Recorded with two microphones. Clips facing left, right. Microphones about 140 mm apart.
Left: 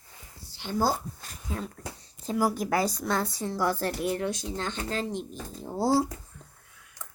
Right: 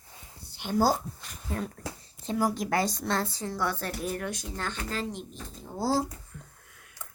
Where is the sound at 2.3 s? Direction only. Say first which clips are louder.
Left 1 dB; 10° left (ahead or behind).